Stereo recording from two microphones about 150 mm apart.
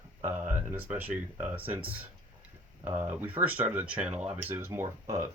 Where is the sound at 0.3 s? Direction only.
15° right (ahead or behind).